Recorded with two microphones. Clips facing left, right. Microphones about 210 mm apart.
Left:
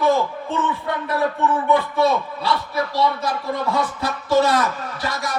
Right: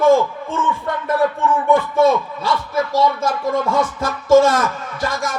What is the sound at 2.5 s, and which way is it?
Speech, 45° right (ahead or behind).